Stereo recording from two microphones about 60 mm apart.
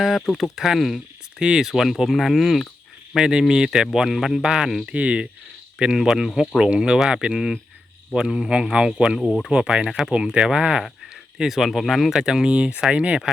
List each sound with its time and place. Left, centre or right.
0.5 s speech: centre
1.4 s speech: centre
4.9 s speech: right
6.0 s speech: centre
7.3 s speech: centre
11.3 s speech: centre
12.2 s speech: centre